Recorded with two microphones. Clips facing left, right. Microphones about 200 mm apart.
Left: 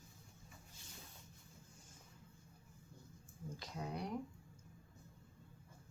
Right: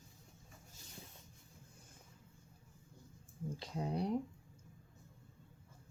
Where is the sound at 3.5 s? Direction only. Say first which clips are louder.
Right 6 dB; 30° right (ahead or behind).